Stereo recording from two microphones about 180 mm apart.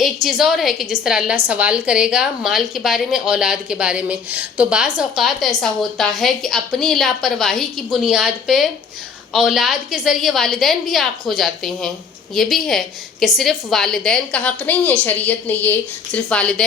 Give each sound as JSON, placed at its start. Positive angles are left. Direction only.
{"t": 0.0, "sound": "a woman's voice", "side_deg": 0}